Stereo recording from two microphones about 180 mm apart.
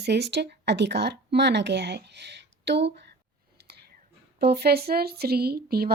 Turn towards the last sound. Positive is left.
turn(degrees=-60)  # may be behind; listen again after turning